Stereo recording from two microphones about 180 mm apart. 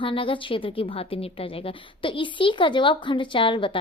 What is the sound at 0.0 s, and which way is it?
A woman's voice, 30° left (ahead or behind).